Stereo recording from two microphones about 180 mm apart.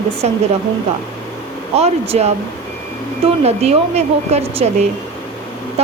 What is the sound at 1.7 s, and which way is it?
Speech, 35° right (ahead or behind).